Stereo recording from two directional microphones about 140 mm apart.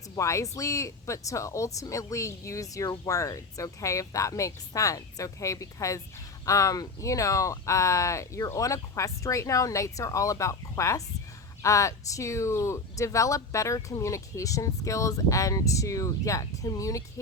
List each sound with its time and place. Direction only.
0.2 s speech: 20° left (ahead or behind)